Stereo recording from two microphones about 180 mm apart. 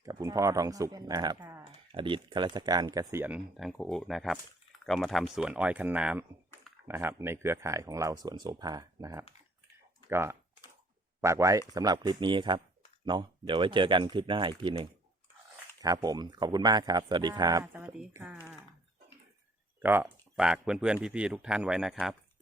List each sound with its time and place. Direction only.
0.0 s speech: 20° right (ahead or behind)
1.4 s typing: 15° right (ahead or behind)
1.9 s speech: 30° right (ahead or behind); by 18.3 s 10° right (ahead or behind)
19.8 s speech: 10° right (ahead or behind)